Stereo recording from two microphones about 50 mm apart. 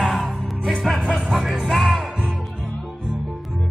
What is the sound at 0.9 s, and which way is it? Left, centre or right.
Music, right.